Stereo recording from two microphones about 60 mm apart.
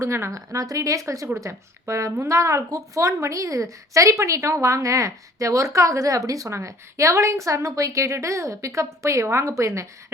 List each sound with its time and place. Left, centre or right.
0.0 s a woman's voice: right
6.5 s a woman's voice: right